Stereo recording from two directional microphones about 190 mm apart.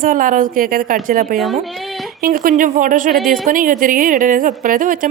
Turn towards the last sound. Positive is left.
turn(degrees=-45)  # may be behind; listen again after turning